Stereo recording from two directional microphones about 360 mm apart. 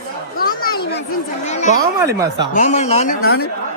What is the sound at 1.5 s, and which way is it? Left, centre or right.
Speech, centre.